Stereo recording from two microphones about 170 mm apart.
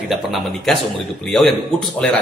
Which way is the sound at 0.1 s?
Centre (ahead or behind).